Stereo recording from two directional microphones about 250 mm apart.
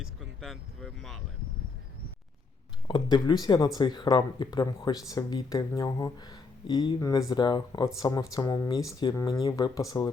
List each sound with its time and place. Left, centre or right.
0.0 s speech: centre
2.8 s speech: centre